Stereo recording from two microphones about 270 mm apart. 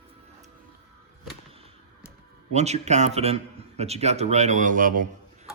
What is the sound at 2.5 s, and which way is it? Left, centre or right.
A man's voice, right.